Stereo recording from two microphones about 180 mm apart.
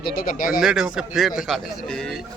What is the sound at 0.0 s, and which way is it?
Speech, 55° left (ahead or behind).